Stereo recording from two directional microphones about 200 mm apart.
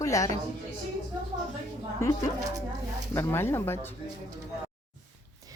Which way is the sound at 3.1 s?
10° left (ahead or behind).